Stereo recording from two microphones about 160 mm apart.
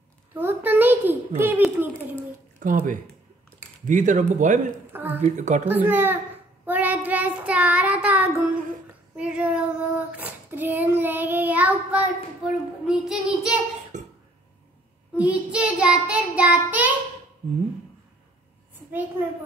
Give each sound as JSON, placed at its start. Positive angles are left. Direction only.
{"t": 0.3, "sound": "a child's voice", "side_deg": -15}
{"t": 2.6, "sound": "speech", "side_deg": -55}
{"t": 3.8, "sound": "speech", "side_deg": -50}
{"t": 4.9, "sound": "speech", "side_deg": -10}
{"t": 5.2, "sound": "speech", "side_deg": -50}
{"t": 5.7, "sound": "child singing", "side_deg": -10}
{"t": 13.9, "sound": "cough", "side_deg": -50}
{"t": 15.1, "sound": "child singing", "side_deg": -10}
{"t": 18.9, "sound": "child singing", "side_deg": -10}